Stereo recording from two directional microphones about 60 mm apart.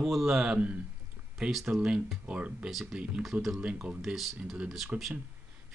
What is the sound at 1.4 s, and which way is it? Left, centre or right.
Speech, centre.